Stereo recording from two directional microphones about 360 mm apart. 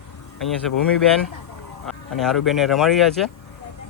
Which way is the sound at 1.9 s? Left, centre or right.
Centre.